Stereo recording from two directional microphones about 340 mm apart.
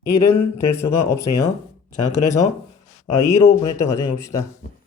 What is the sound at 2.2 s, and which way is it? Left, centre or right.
Speech, left.